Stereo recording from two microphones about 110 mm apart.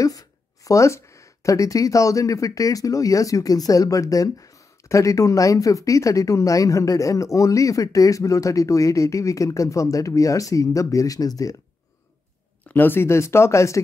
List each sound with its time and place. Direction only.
0.0 s speech: 30° left (ahead or behind)
12.6 s speech: 20° left (ahead or behind)